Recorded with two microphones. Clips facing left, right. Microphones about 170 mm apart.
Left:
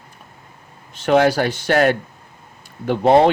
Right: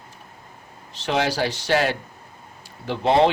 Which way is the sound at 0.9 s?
50° left (ahead or behind).